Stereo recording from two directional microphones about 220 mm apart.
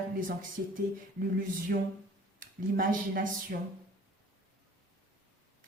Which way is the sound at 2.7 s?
40° right (ahead or behind).